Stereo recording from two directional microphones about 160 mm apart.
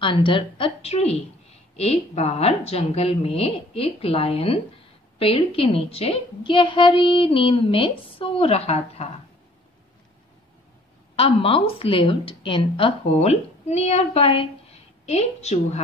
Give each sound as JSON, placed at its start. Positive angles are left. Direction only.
{"t": 0.0, "sound": "a woman's voice", "side_deg": 30}
{"t": 11.1, "sound": "a woman's voice", "side_deg": 35}